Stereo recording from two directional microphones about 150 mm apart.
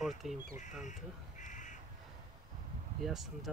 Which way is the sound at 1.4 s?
55° left (ahead or behind).